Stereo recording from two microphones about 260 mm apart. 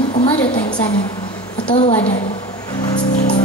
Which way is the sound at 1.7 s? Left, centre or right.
Left.